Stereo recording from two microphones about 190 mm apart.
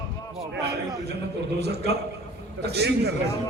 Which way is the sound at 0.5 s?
60° right (ahead or behind).